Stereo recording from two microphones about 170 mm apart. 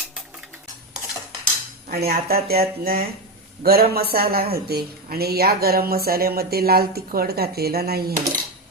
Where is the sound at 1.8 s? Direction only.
60° right (ahead or behind).